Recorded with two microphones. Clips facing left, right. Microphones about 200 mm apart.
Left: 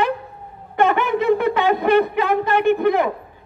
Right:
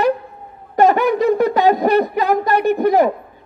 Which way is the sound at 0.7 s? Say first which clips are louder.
Right 4 dB; 40° right (ahead or behind).